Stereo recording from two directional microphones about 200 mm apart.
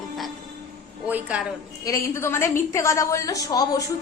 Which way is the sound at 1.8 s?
15° left (ahead or behind).